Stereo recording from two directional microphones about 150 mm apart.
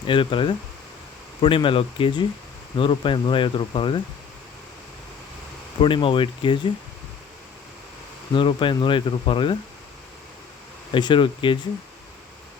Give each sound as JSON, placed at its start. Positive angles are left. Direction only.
{"t": 0.1, "sound": "speech", "side_deg": 35}
{"t": 5.8, "sound": "speech", "side_deg": 35}
{"t": 8.3, "sound": "speech", "side_deg": 35}
{"t": 10.9, "sound": "speech", "side_deg": 35}